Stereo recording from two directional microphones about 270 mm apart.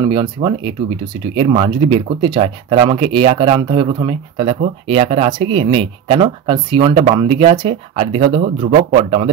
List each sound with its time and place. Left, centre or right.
0.0 s speech: centre